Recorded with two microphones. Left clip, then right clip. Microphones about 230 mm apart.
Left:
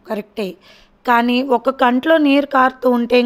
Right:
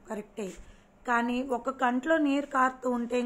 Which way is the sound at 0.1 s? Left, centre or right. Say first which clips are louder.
Left 14 dB; left.